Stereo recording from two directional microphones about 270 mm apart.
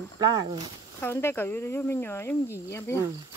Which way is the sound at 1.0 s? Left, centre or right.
Centre.